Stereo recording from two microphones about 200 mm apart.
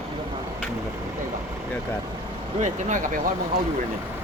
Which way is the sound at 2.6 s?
40° right (ahead or behind).